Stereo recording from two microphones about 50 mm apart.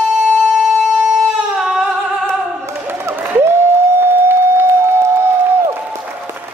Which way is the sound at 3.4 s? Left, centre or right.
Right.